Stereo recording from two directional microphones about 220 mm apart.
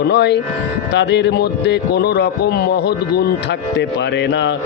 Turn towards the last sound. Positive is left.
turn(degrees=45)  # may be behind; listen again after turning